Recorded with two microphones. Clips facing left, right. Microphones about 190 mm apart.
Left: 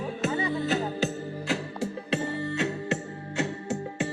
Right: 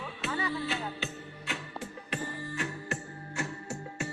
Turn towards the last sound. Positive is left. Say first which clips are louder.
# left 8 dB
turn(degrees=20)  # may be behind; listen again after turning